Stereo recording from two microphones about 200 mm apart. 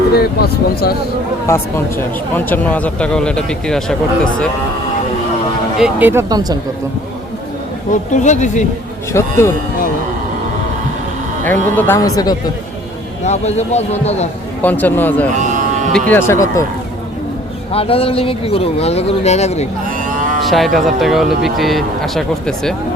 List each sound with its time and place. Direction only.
0.1 s speech: 50° left (ahead or behind)
1.5 s speech: 10° left (ahead or behind)
5.8 s speech: 10° right (ahead or behind)
8.1 s a man's voice: 35° left (ahead or behind)
9.1 s speech: 15° left (ahead or behind)
11.4 s speech: 10° left (ahead or behind)
13.2 s a man's voice: 35° left (ahead or behind)
14.6 s speech: 10° left (ahead or behind)
17.7 s speech: 30° left (ahead or behind)
20.0 s moo: 40° right (ahead or behind)
20.4 s speech: centre (ahead or behind)